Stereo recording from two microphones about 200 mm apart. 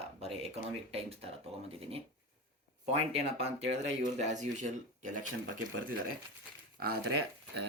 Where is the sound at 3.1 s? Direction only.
30° right (ahead or behind).